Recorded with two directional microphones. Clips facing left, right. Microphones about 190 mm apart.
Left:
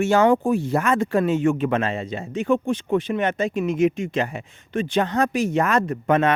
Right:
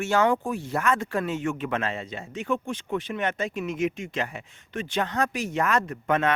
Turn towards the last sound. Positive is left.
turn(degrees=30)  # may be behind; listen again after turning